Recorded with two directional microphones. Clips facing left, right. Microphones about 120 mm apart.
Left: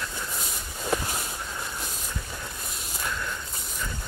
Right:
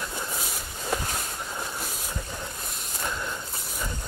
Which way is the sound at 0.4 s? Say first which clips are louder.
Even; centre (ahead or behind).